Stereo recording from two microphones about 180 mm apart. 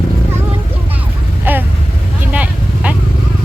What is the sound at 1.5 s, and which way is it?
Vehicle, 10° right (ahead or behind).